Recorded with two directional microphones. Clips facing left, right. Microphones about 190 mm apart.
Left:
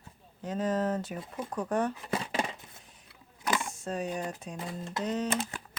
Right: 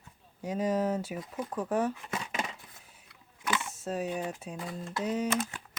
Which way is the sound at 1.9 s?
35° left (ahead or behind).